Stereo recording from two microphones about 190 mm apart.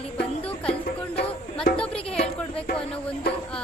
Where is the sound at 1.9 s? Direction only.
30° left (ahead or behind).